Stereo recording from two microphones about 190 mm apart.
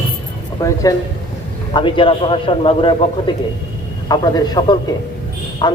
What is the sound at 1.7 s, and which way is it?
A man's voice, 25° left (ahead or behind).